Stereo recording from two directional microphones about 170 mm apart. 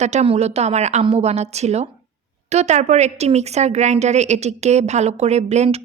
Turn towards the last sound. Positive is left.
turn(degrees=-40)  # may be behind; listen again after turning